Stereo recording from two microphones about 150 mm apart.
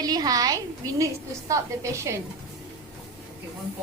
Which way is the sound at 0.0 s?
25° right (ahead or behind).